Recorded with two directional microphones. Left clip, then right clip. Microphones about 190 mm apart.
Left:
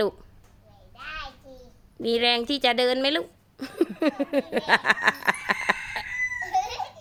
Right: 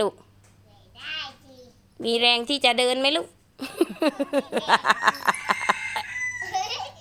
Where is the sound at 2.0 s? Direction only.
10° left (ahead or behind).